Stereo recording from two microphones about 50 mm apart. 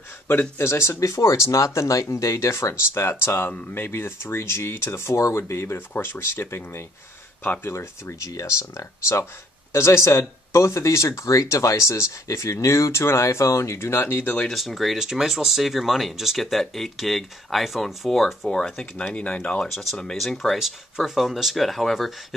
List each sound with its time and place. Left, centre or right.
0.6 s speech: left
2.9 s speech: left
5.8 s speech: left
14.2 s speech: left
14.5 s speech: centre
18.5 s speech: centre
19.7 s speech: centre
20.5 s speech: centre